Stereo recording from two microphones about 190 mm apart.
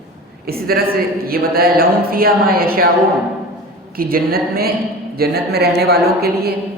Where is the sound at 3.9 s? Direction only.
50° right (ahead or behind).